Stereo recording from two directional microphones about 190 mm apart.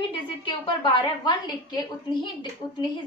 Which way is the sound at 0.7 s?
25° left (ahead or behind).